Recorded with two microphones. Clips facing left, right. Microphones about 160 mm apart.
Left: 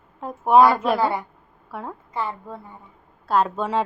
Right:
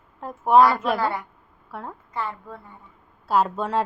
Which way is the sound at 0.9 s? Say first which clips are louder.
Left 3 dB; 25° left (ahead or behind).